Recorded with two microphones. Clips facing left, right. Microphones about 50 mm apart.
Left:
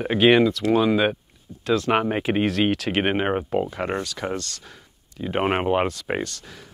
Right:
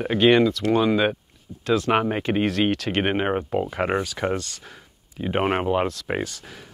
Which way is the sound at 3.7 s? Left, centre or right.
Centre.